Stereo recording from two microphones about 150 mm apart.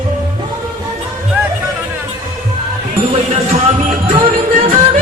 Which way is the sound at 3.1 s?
45° right (ahead or behind).